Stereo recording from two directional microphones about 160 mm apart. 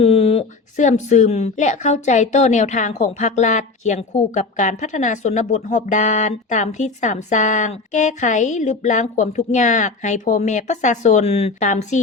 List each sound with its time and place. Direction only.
0.0 s speech: 40° left (ahead or behind)